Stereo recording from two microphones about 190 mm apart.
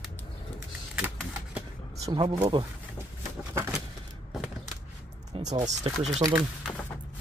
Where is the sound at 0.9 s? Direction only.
10° right (ahead or behind).